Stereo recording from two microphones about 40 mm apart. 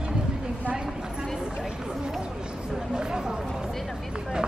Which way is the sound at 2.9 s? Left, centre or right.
Centre.